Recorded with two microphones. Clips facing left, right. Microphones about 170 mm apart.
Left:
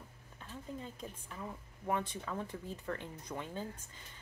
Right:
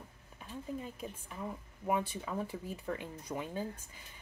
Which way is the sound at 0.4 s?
10° right (ahead or behind).